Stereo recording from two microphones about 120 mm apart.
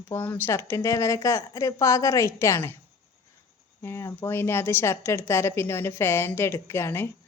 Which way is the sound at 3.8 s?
20° left (ahead or behind).